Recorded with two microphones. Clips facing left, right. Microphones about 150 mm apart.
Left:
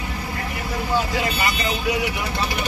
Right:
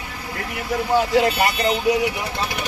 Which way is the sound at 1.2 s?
60° right (ahead or behind).